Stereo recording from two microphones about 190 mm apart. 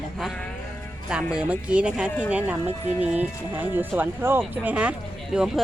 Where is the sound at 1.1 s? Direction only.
5° right (ahead or behind).